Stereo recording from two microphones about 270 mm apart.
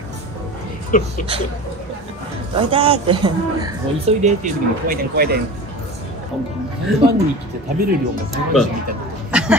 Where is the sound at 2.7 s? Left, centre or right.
Centre.